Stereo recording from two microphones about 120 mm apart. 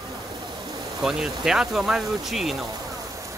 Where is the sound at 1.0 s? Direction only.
5° right (ahead or behind).